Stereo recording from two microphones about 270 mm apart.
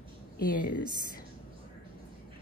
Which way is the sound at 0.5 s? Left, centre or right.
Left.